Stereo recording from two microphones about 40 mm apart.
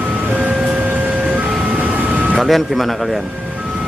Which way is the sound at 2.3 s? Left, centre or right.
Centre.